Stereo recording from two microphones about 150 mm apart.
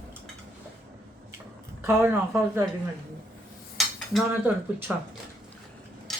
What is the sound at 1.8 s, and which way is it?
Speech, 15° right (ahead or behind).